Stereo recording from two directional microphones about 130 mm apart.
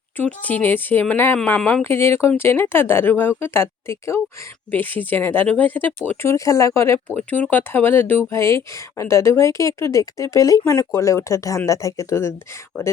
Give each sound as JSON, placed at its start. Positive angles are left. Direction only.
{"t": 0.2, "sound": "speech", "side_deg": 10}